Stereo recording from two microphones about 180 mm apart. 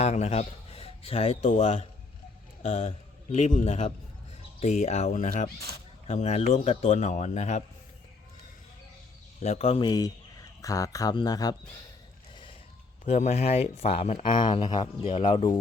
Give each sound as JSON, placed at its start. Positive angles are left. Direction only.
{"t": 0.0, "sound": "a man's voice", "side_deg": 35}
{"t": 9.4, "sound": "a man's voice", "side_deg": 35}
{"t": 13.1, "sound": "a man's voice", "side_deg": 40}